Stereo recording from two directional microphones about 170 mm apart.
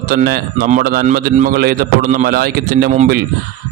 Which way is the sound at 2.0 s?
45° right (ahead or behind).